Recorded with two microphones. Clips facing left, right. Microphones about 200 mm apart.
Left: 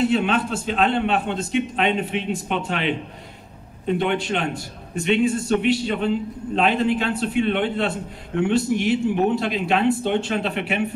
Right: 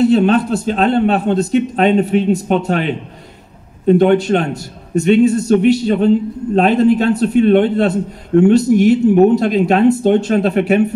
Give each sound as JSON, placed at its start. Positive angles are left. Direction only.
{"t": 0.0, "sound": "a man's voice", "side_deg": -40}